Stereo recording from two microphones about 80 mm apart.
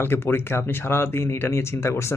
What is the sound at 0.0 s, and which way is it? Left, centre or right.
Speech, left.